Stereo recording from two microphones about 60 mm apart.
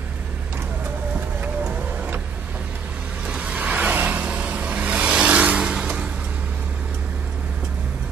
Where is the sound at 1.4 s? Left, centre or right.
Right.